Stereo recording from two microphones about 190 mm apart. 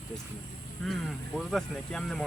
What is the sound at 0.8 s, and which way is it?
Speech, centre (ahead or behind).